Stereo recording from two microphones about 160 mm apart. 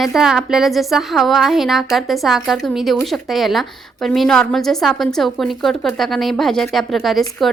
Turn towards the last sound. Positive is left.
turn(degrees=0)  # may be behind; listen again after turning